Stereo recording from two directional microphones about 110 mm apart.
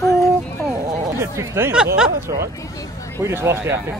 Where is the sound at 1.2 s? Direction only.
25° right (ahead or behind).